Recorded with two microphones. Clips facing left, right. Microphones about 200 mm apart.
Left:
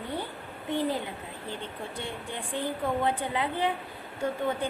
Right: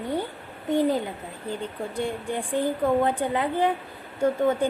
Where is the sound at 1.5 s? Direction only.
40° right (ahead or behind).